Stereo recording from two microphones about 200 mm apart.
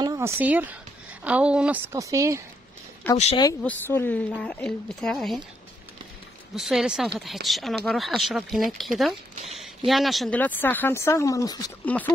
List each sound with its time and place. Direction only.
0.0 s a woman's voice: 15° right (ahead or behind)
3.2 s speech: 30° left (ahead or behind)
3.6 s speech: 10° left (ahead or behind)
6.5 s speech: centre (ahead or behind); by 11.7 s 20° left (ahead or behind)
11.8 s speech: 10° left (ahead or behind)